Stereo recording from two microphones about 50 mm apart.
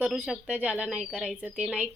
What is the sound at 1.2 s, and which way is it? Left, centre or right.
Speech, centre.